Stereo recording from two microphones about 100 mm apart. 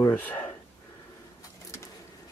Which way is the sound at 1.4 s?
30° left (ahead or behind).